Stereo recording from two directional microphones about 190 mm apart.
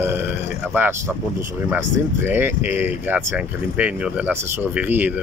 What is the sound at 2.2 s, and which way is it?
Speech, 10° right (ahead or behind).